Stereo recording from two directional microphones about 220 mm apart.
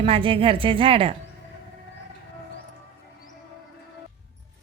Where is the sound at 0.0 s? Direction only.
25° right (ahead or behind).